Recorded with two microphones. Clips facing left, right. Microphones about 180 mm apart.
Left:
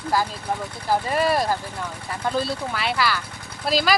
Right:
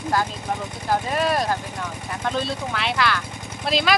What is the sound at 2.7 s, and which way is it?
Speech, 5° left (ahead or behind).